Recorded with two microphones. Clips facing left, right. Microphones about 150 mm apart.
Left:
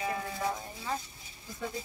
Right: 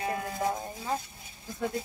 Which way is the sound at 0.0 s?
45° right (ahead or behind).